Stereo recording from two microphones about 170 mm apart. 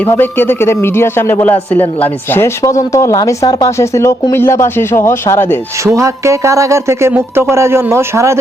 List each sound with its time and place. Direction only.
0.0 s speech: 10° left (ahead or behind)
5.8 s speech: 15° right (ahead or behind)